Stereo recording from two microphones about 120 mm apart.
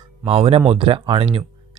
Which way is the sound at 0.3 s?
50° right (ahead or behind).